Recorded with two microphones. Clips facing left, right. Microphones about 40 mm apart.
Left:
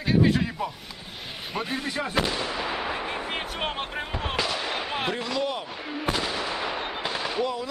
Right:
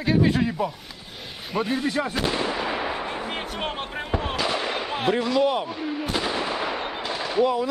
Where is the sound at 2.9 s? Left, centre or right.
Centre.